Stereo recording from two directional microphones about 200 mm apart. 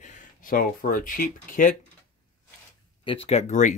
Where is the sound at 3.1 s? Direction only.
30° left (ahead or behind).